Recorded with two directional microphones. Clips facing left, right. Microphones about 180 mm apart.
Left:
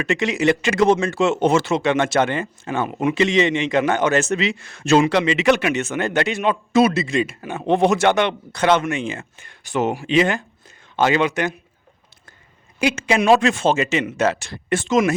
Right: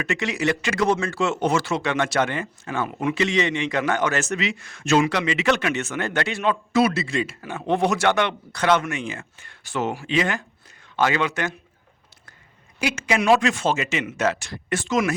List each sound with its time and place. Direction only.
0.1 s a man's voice: 20° left (ahead or behind)
5.5 s a man's voice: 15° left (ahead or behind)
12.8 s a man's voice: 25° left (ahead or behind)